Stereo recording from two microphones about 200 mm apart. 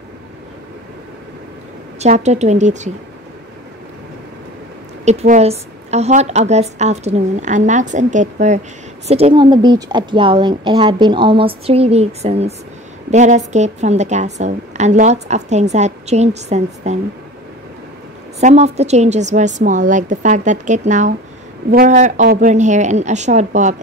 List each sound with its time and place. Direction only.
2.0 s a woman's voice: 35° right (ahead or behind)
5.0 s a woman's voice: 35° right (ahead or behind)
18.4 s a woman's voice: 35° right (ahead or behind)